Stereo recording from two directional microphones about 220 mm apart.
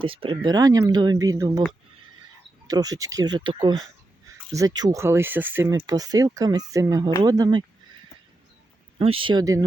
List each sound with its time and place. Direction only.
0.0 s speech: 25° right (ahead or behind)
2.6 s speech: 15° right (ahead or behind)
9.0 s speech: 25° right (ahead or behind)